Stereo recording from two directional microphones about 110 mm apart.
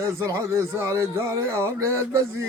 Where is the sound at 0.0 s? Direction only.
25° right (ahead or behind).